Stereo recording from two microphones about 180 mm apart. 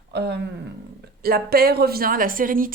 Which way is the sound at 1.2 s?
60° right (ahead or behind).